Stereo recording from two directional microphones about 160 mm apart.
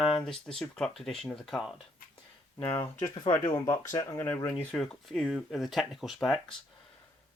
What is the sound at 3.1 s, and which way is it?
Speech, 30° left (ahead or behind).